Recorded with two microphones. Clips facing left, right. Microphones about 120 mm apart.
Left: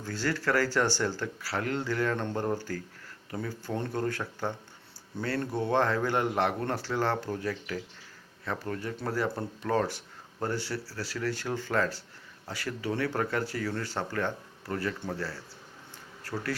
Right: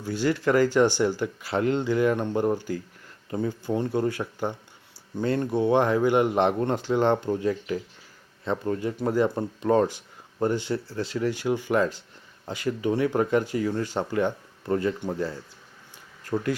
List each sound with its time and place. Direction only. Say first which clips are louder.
0.0 s speech: right 6 dB; 15° right (ahead or behind)